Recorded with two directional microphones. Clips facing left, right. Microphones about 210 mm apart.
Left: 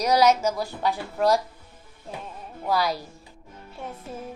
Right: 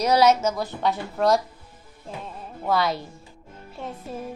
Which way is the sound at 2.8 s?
25° right (ahead or behind).